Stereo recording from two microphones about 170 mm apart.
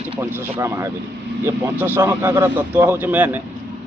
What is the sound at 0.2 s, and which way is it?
A man's voice, 10° right (ahead or behind).